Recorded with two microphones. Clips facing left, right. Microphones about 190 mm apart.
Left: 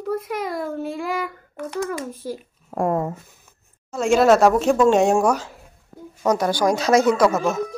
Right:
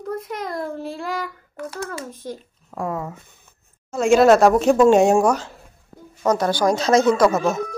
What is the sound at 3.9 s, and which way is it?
A child's voice, centre (ahead or behind).